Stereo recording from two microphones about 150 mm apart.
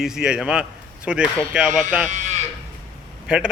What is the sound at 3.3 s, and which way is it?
Speech, 5° right (ahead or behind).